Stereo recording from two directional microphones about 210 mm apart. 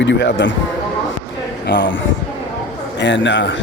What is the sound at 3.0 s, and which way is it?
Speech, 60° left (ahead or behind).